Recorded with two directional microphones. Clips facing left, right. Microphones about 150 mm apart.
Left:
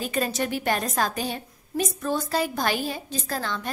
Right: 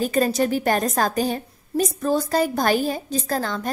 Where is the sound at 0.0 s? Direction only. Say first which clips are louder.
Right 7 dB; 40° right (ahead or behind).